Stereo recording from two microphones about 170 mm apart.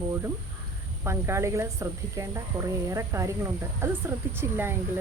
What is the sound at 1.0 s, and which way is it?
Speech, 15° right (ahead or behind).